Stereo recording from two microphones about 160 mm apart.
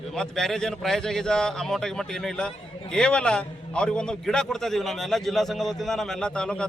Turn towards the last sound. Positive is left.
turn(degrees=5)  # may be behind; listen again after turning